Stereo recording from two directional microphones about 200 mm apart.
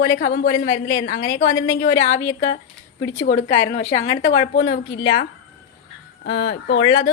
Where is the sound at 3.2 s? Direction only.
35° left (ahead or behind).